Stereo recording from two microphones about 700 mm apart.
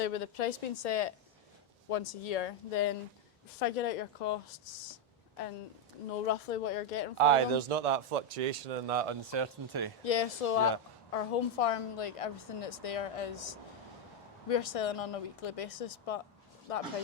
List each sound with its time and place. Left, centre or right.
0.0 s a woman's voice: left
3.6 s speech: left
6.2 s a woman's voice: left
7.2 s a man's voice: right
10.0 s a woman's voice: left